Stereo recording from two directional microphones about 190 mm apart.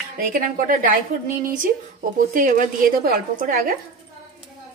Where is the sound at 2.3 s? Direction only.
45° right (ahead or behind).